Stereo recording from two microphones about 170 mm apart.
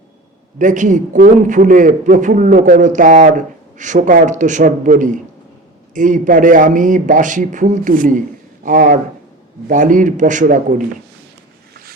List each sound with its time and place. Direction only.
0.6 s a man's voice: 45° right (ahead or behind)